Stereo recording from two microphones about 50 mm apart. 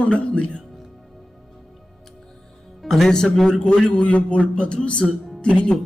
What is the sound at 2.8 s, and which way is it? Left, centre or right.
A man's voice, centre.